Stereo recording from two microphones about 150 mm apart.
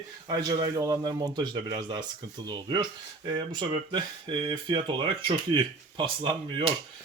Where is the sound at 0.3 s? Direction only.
25° right (ahead or behind).